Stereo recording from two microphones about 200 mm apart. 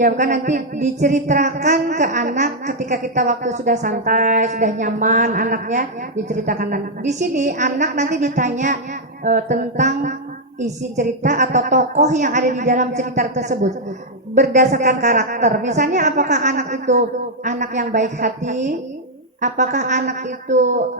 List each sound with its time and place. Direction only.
0.0 s speech: 40° right (ahead or behind)